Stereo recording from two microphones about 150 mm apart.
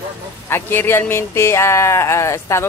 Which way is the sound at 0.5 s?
15° left (ahead or behind).